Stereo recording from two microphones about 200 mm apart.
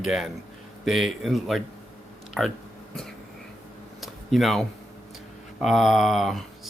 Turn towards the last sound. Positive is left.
turn(degrees=0)  # may be behind; listen again after turning